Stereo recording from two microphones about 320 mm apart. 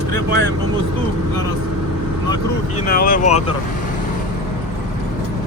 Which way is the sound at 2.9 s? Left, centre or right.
Left.